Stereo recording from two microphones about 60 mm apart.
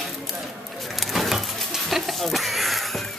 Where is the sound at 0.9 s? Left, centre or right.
Centre.